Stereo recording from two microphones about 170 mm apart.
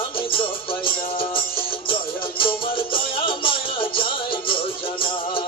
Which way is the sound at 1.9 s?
30° left (ahead or behind).